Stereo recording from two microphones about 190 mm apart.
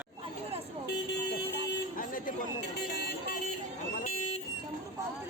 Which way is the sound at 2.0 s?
45° left (ahead or behind).